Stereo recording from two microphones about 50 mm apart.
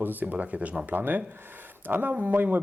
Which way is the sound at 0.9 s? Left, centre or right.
Right.